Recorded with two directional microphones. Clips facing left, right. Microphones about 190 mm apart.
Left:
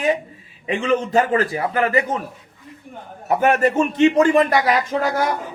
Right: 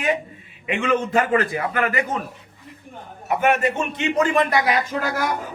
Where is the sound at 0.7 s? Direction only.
30° left (ahead or behind).